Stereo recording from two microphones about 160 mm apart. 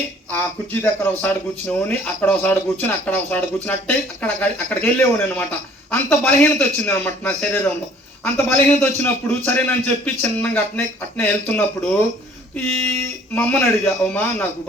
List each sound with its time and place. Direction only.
0.3 s speech: 10° left (ahead or behind)